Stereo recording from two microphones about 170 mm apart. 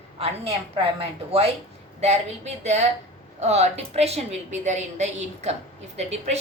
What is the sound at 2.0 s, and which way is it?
A woman's voice, 40° right (ahead or behind).